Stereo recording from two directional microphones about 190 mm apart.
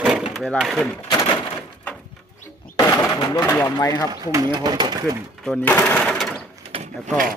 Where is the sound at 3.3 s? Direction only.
10° left (ahead or behind).